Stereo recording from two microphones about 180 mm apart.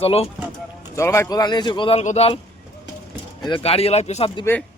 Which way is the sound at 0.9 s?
15° left (ahead or behind).